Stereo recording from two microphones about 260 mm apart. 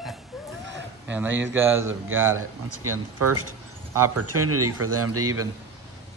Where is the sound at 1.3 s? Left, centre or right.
Right.